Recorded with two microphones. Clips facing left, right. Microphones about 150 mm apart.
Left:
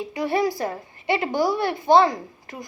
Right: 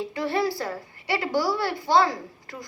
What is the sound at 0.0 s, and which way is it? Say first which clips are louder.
A woman's voice: left 3 dB; 15° left (ahead or behind).